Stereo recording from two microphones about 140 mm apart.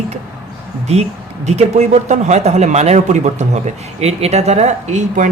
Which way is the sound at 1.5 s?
55° right (ahead or behind).